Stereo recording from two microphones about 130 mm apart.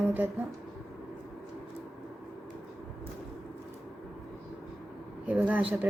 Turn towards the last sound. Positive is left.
turn(degrees=-15)  # may be behind; listen again after turning